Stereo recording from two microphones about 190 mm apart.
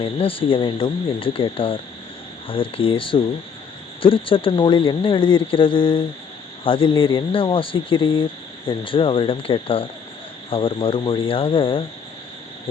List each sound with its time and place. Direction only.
0.0 s speech: 30° left (ahead or behind)